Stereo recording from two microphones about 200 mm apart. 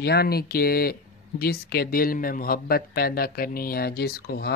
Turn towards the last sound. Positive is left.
turn(degrees=50)  # may be behind; listen again after turning